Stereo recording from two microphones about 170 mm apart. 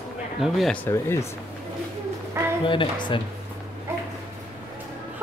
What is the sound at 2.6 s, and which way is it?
Speech, 30° left (ahead or behind).